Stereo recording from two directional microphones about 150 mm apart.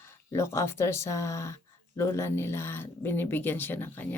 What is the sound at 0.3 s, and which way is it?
Speech, 20° left (ahead or behind).